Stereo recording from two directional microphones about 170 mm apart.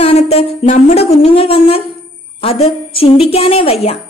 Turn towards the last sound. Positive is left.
turn(degrees=35)  # may be behind; listen again after turning